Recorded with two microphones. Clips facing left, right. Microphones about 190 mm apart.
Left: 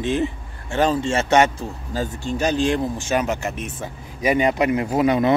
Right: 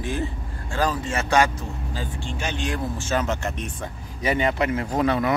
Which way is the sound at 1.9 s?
40° left (ahead or behind).